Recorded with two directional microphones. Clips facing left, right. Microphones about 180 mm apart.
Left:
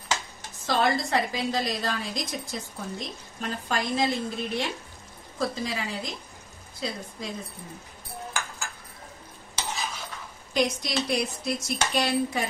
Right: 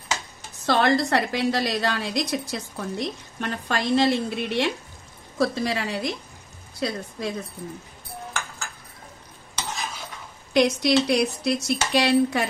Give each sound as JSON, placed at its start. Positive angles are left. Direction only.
{"t": 0.7, "sound": "a woman's voice", "side_deg": -75}
{"t": 10.5, "sound": "a woman's voice", "side_deg": -70}